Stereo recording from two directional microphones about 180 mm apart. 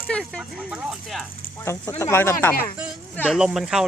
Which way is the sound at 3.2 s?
5° right (ahead or behind).